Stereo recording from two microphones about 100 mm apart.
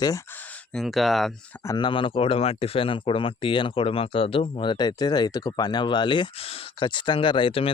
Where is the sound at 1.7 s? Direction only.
55° left (ahead or behind).